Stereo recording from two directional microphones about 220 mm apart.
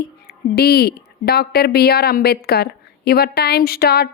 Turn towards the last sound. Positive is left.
turn(degrees=45)  # may be behind; listen again after turning